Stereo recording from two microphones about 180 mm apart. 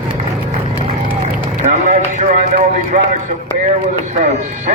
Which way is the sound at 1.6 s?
45° right (ahead or behind).